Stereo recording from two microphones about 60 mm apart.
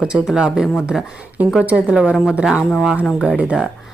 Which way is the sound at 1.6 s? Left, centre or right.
Right.